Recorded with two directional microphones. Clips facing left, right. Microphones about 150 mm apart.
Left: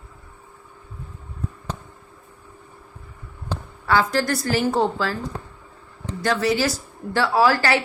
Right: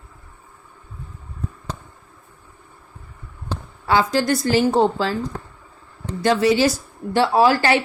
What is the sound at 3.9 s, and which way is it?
Speech, 15° right (ahead or behind).